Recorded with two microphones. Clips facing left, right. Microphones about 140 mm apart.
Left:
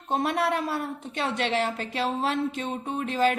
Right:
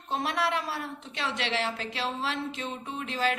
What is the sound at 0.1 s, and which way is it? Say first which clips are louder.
A woman's voice: left 4 dB; 50° left (ahead or behind).